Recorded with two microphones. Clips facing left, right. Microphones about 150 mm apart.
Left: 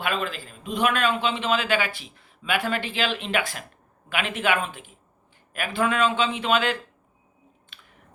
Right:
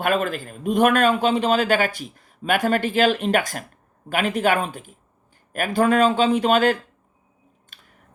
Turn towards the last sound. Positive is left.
turn(degrees=-40)  # may be behind; listen again after turning